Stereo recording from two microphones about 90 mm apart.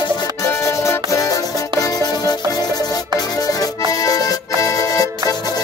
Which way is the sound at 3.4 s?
40° left (ahead or behind).